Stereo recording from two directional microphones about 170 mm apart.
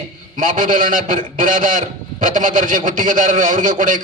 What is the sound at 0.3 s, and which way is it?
A man's voice, 50° right (ahead or behind).